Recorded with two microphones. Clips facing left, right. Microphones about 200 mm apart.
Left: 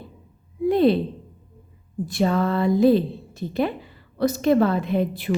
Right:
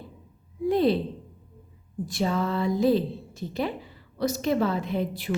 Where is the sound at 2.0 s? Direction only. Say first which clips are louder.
Left 5 dB; 60° left (ahead or behind).